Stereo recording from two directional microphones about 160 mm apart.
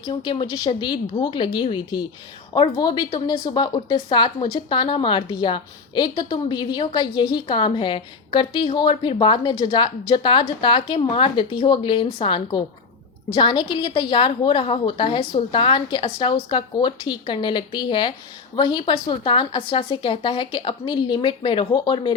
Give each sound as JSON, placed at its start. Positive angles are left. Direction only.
{"t": 0.1, "sound": "a woman's voice", "side_deg": 30}